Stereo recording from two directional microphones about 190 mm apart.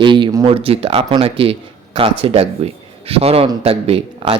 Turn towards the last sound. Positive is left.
turn(degrees=-30)  # may be behind; listen again after turning